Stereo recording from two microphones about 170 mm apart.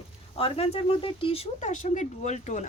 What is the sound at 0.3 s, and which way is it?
Speech, 35° left (ahead or behind).